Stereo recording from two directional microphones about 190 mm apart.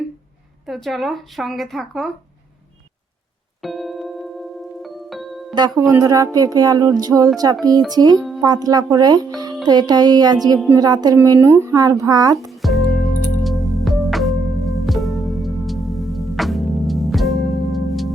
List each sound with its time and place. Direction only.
0.7 s speech: centre (ahead or behind)
3.6 s music: centre (ahead or behind)
5.5 s a woman's voice: 20° right (ahead or behind)
12.5 s music: centre (ahead or behind)